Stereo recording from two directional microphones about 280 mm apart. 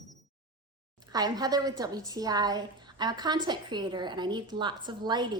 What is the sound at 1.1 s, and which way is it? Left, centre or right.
A woman's voice, centre.